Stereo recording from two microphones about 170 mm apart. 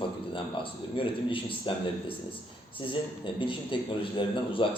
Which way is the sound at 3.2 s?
30° left (ahead or behind).